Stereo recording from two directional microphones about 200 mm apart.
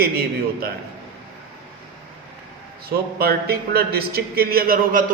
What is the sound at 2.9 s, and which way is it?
A man's voice, 50° right (ahead or behind).